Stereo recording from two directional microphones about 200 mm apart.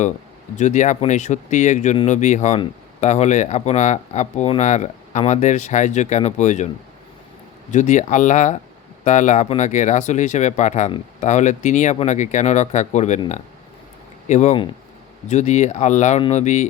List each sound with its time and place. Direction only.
0.5 s speech: 35° left (ahead or behind)
7.7 s speech: 40° left (ahead or behind)